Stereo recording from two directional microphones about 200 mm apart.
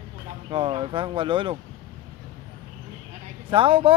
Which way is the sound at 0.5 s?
25° right (ahead or behind).